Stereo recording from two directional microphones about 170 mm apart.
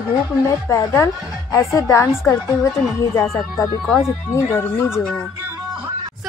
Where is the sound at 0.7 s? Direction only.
20° left (ahead or behind).